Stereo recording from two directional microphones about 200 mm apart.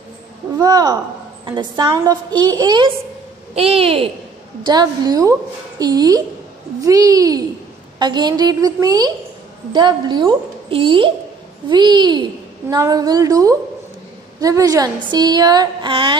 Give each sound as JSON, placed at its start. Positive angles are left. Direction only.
{"t": 0.6, "sound": "a child's voice", "side_deg": -20}